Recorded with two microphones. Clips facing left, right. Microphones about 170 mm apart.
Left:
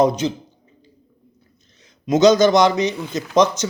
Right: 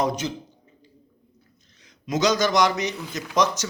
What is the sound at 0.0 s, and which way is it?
Speech, 25° left (ahead or behind).